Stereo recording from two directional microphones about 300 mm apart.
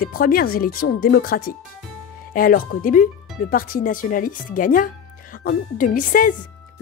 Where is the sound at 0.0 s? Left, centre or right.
Left.